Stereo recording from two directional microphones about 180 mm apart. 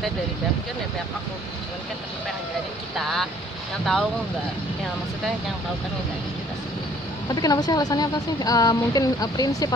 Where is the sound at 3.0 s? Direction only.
Centre (ahead or behind).